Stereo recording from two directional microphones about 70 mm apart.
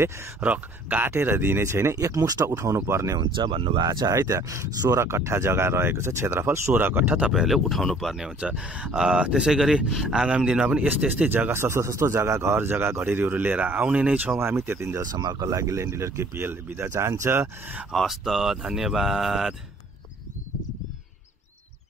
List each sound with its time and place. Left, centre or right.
0.4 s speech: right
2.4 s speech: right
3.4 s speech: right
4.1 s speech: right
7.2 s speech: centre
8.4 s speech: centre
11.2 s speech: right
14.4 s speech: right
15.0 s speech: right
17.9 s speech: centre